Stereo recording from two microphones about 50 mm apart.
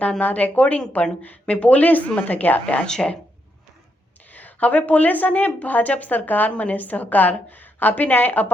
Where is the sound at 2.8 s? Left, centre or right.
Centre.